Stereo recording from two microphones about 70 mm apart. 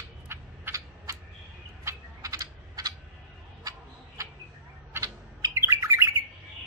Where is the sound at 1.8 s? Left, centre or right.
Right.